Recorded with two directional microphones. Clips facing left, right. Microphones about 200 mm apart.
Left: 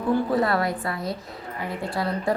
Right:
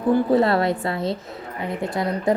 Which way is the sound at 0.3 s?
25° right (ahead or behind).